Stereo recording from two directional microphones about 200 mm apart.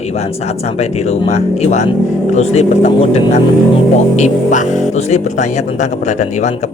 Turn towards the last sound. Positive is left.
turn(degrees=35)  # may be behind; listen again after turning